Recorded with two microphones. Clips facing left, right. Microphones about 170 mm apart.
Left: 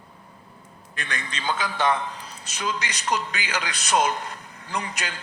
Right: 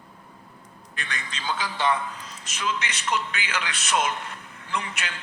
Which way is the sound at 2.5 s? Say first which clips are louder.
Even; 35° left (ahead or behind).